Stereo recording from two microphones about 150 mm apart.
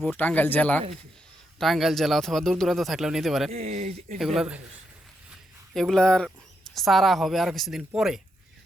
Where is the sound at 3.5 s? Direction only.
45° right (ahead or behind).